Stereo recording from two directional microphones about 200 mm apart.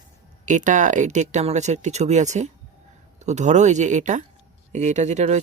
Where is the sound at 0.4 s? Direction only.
40° right (ahead or behind).